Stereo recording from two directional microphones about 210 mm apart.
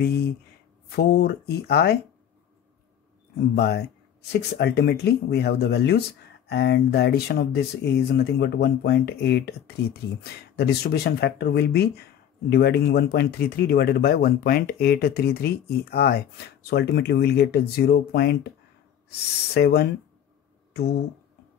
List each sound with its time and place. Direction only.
0.9 s speech: 50° left (ahead or behind)
3.3 s speech: 50° left (ahead or behind)
19.5 s speech: 50° left (ahead or behind)